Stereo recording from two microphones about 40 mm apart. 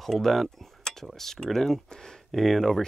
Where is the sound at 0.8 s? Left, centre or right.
Centre.